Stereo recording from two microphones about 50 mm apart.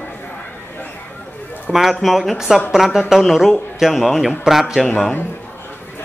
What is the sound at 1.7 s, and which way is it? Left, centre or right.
A man's voice, centre.